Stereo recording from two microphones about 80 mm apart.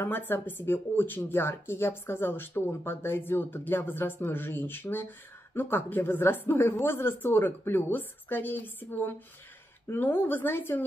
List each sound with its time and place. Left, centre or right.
0.0 s speech: left